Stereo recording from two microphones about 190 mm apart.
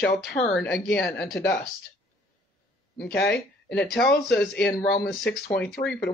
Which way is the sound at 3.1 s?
55° left (ahead or behind).